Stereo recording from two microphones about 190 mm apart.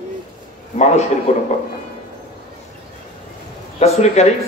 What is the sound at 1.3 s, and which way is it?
Speech, 35° left (ahead or behind).